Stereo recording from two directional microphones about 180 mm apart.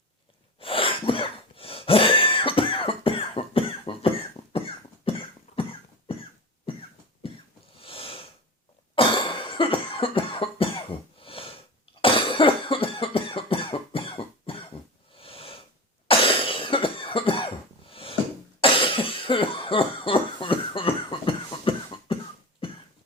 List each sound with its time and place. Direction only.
0.6 s cough: 30° left (ahead or behind)
7.2 s a sound: 30° left (ahead or behind)
7.8 s snort: 30° left (ahead or behind)
9.0 s cough: 25° left (ahead or behind)
15.2 s a sound: 30° left (ahead or behind)
16.0 s cough: 30° left (ahead or behind)